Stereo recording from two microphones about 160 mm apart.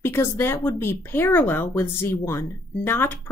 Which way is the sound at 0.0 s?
15° left (ahead or behind).